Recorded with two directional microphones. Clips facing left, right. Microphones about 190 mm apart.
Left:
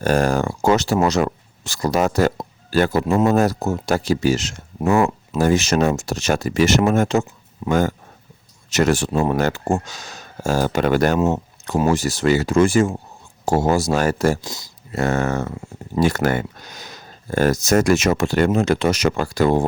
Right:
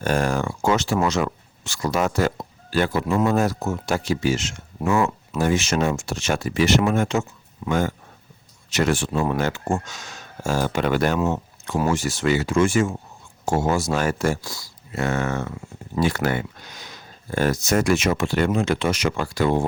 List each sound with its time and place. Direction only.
0.0 s speech: 40° left (ahead or behind)
14.4 s speech: 20° left (ahead or behind)
14.9 s speech: 40° left (ahead or behind)